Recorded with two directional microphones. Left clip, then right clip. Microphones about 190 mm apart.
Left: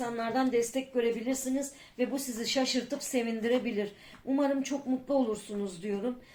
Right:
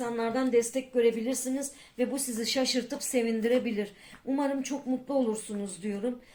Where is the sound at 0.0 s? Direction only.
30° right (ahead or behind).